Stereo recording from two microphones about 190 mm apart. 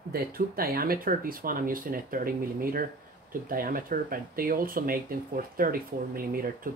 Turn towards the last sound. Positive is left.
turn(degrees=-50)  # may be behind; listen again after turning